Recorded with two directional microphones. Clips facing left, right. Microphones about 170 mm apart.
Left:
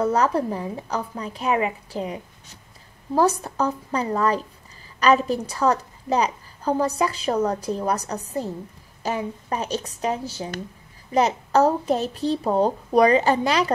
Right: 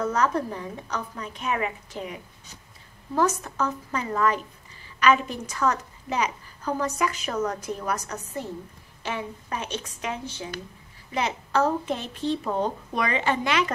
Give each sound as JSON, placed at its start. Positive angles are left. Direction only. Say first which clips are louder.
{"t": 0.0, "sound": "a woman's voice", "louder": "left 4 dB", "side_deg": 30}
{"t": 3.2, "sound": "a woman's voice", "louder": "left 4 dB", "side_deg": 35}